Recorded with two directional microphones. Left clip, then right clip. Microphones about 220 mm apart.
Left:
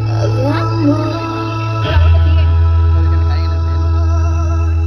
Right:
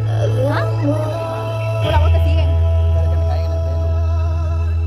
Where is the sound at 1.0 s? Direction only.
45° right (ahead or behind).